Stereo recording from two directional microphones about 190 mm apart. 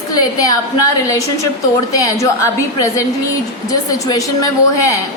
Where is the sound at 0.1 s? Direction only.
20° left (ahead or behind).